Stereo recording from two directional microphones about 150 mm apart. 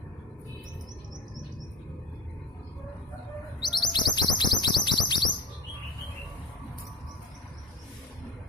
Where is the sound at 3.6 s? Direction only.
30° left (ahead or behind).